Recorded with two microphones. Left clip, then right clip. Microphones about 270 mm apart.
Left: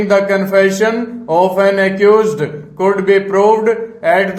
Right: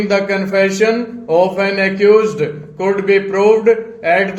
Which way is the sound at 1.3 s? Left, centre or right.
Left.